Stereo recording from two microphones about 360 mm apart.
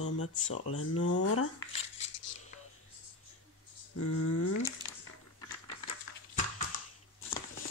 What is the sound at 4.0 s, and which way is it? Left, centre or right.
Speech, left.